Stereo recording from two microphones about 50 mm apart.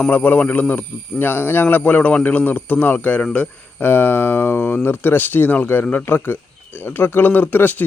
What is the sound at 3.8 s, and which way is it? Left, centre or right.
Speech, left.